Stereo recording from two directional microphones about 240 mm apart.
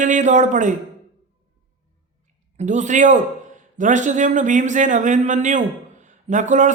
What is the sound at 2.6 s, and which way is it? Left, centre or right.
Speech, right.